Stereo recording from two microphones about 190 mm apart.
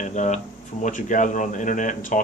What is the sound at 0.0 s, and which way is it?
Speech, 40° left (ahead or behind).